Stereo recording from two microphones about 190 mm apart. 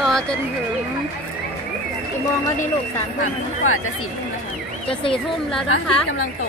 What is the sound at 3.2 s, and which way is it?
Speech, 90° left.